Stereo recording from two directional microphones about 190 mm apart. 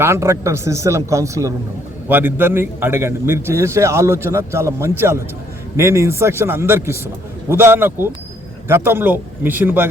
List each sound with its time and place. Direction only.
0.0 s a man's voice: 15° right (ahead or behind)